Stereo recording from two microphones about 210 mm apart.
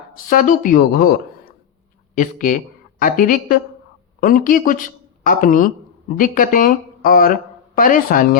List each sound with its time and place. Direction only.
0.3 s a woman's voice: 40° left (ahead or behind)